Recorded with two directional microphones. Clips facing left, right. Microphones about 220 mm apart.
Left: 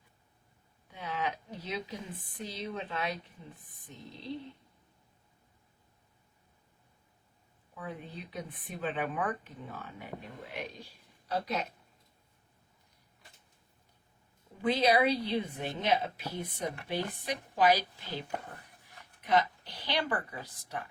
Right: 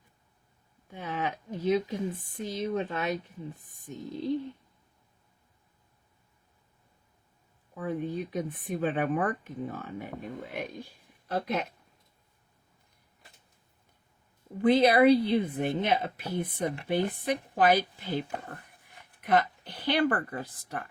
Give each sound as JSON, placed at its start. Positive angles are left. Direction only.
{"t": 0.9, "sound": "speech", "side_deg": -50}
{"t": 7.8, "sound": "speech", "side_deg": -45}
{"t": 14.6, "sound": "speech", "side_deg": -55}
{"t": 19.2, "sound": "speech", "side_deg": -55}